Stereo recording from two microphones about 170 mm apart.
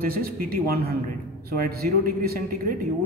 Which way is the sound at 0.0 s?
60° right (ahead or behind).